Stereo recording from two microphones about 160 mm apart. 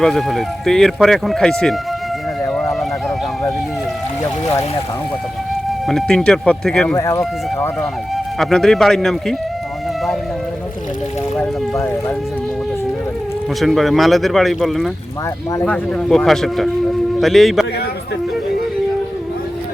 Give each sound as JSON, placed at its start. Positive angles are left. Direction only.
{"t": 0.0, "sound": "speech", "side_deg": 0}
{"t": 2.4, "sound": "a sound", "side_deg": 5}
{"t": 4.2, "sound": "speech", "side_deg": 20}
{"t": 5.9, "sound": "speech", "side_deg": 0}
{"t": 6.9, "sound": "speech", "side_deg": 20}
{"t": 8.1, "sound": "speech", "side_deg": 0}
{"t": 13.6, "sound": "speech", "side_deg": 0}